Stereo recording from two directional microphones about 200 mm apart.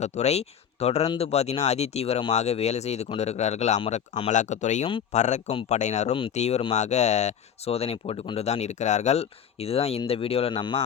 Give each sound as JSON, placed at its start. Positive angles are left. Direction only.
{"t": 0.0, "sound": "speech", "side_deg": 35}